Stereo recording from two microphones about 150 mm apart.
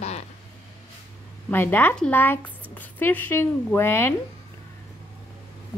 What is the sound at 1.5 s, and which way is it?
A woman's voice, 15° left (ahead or behind).